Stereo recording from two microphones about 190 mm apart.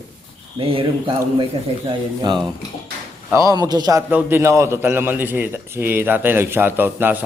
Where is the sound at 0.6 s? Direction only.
30° right (ahead or behind).